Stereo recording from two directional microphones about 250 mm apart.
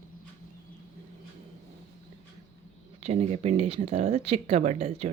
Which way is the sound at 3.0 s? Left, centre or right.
Right.